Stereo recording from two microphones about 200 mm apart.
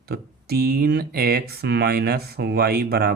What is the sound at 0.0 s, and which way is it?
Speech, 50° right (ahead or behind).